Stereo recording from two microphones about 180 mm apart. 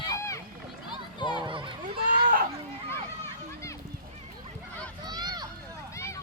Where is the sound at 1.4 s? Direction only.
30° right (ahead or behind).